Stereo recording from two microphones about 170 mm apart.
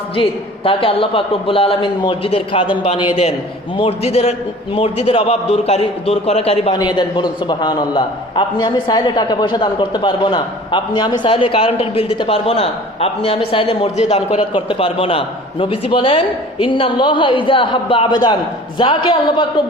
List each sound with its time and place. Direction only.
0.2 s a man's voice: 30° left (ahead or behind)